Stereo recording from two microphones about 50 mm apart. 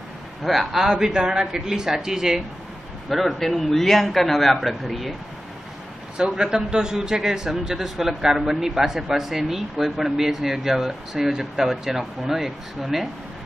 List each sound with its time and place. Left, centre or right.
0.4 s a man's voice: centre
6.1 s speech: centre